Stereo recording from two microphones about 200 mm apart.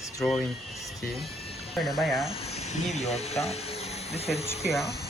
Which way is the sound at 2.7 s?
35° left (ahead or behind).